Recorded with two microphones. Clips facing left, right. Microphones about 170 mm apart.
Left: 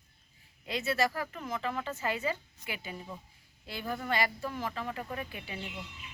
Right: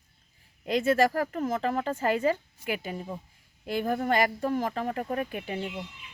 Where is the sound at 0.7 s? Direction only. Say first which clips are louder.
Right 8 dB; 45° right (ahead or behind).